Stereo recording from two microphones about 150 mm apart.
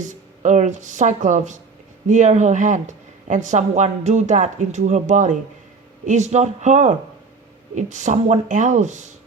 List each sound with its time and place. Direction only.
0.0 s speech: 55° right (ahead or behind)